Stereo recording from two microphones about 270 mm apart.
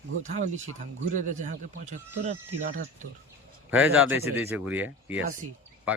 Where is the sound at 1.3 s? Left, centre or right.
Right.